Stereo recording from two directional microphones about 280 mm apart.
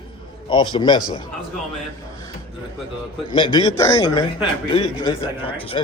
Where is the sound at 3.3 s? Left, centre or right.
Centre.